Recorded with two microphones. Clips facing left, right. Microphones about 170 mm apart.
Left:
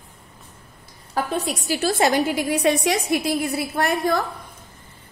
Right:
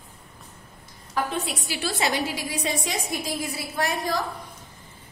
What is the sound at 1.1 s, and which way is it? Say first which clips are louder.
A woman's voice: left 3 dB; 40° left (ahead or behind).